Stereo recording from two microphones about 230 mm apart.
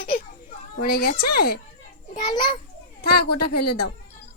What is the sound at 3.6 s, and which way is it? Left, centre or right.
Speech, left.